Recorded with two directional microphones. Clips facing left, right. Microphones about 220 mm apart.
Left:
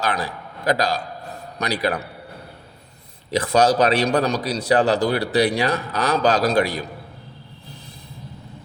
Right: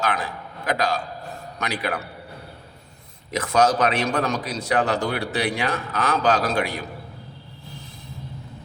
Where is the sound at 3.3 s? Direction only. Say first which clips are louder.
Left 3 dB; 30° left (ahead or behind).